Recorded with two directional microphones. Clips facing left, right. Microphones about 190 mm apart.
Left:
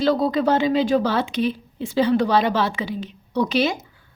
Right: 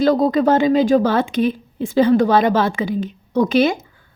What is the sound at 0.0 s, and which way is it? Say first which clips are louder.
Speech: right 4 dB; 45° right (ahead or behind).